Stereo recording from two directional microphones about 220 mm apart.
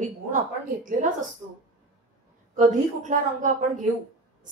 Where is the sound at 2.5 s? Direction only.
35° right (ahead or behind).